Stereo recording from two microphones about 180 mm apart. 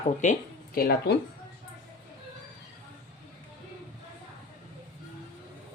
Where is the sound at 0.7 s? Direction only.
55° left (ahead or behind).